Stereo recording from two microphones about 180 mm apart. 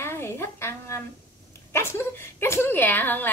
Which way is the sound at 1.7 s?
15° left (ahead or behind).